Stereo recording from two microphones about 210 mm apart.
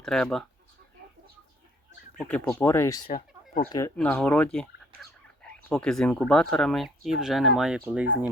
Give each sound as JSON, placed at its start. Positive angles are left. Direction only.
{"t": 0.0, "sound": "speech", "side_deg": 5}
{"t": 2.1, "sound": "speech", "side_deg": 5}
{"t": 3.1, "sound": "speech", "side_deg": 35}
{"t": 3.7, "sound": "speech", "side_deg": 15}
{"t": 5.6, "sound": "speech", "side_deg": 5}